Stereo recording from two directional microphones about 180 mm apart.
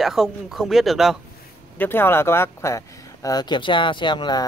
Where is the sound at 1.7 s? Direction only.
10° left (ahead or behind).